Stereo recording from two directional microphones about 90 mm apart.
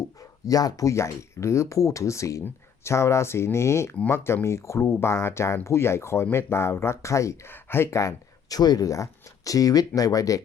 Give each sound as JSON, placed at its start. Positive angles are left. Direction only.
{"t": 0.2, "sound": "speech", "side_deg": 40}